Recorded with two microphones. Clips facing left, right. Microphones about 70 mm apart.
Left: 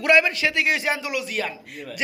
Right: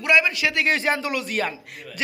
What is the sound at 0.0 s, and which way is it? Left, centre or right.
Speech, left.